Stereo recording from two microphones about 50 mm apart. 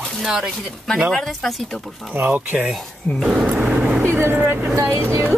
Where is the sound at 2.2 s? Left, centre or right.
Right.